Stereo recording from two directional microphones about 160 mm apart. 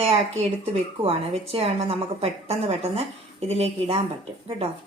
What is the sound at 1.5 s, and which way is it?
A woman's voice, 35° right (ahead or behind).